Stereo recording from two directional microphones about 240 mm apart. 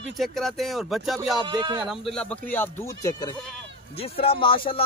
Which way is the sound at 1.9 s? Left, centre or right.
Centre.